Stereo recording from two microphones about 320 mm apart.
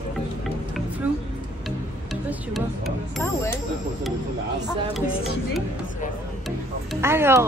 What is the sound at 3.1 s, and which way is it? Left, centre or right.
Speech, centre.